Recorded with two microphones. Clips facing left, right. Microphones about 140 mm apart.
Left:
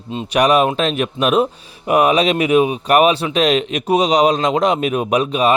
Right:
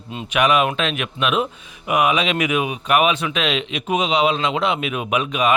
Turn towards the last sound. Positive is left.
turn(degrees=35)  # may be behind; listen again after turning